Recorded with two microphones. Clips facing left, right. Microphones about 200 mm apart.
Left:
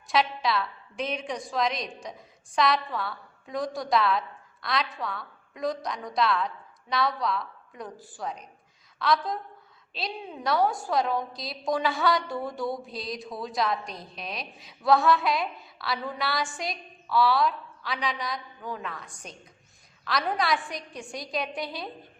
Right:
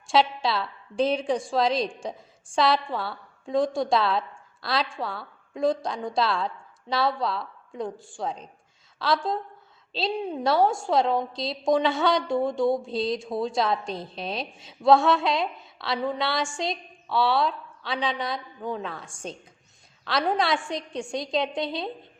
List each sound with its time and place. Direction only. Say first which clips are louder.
0.1 s a woman's voice: right 3 dB; 30° right (ahead or behind)